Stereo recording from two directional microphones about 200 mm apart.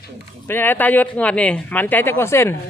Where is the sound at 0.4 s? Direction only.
10° left (ahead or behind).